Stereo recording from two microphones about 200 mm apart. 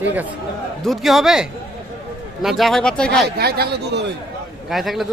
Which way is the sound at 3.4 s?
50° right (ahead or behind).